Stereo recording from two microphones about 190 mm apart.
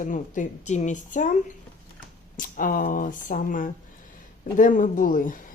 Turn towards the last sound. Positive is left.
turn(degrees=45)  # may be behind; listen again after turning